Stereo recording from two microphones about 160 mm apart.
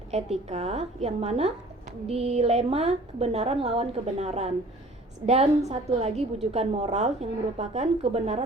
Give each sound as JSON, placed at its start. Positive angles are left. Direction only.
{"t": 0.1, "sound": "a woman's voice", "side_deg": -40}